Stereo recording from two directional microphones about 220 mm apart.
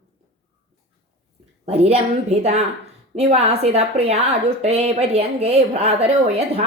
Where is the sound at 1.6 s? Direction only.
30° right (ahead or behind).